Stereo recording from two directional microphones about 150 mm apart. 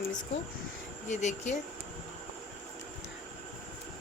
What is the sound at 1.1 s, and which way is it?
Speech, 50° left (ahead or behind).